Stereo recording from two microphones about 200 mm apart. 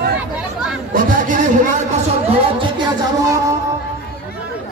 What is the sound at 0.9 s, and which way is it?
Chatter, 45° right (ahead or behind).